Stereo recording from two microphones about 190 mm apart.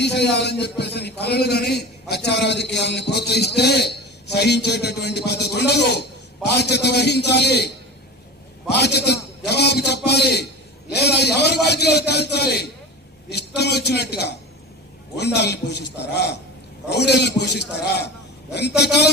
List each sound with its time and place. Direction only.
0.0 s a man's voice: 60° left (ahead or behind)
8.7 s a man's voice: 60° left (ahead or behind)
18.8 s a man's voice: 60° left (ahead or behind)